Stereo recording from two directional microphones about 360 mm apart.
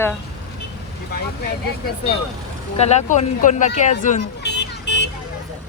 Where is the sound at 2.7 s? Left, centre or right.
Centre.